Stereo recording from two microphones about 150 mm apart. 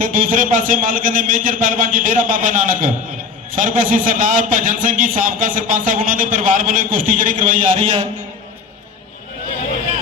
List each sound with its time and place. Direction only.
0.0 s a man's voice: 65° right (ahead or behind)
7.8 s a man's voice: 35° right (ahead or behind)